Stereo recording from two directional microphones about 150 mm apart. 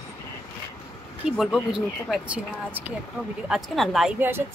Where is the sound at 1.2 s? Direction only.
5° right (ahead or behind).